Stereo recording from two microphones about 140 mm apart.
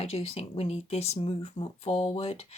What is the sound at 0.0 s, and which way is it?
Speech, 45° left (ahead or behind).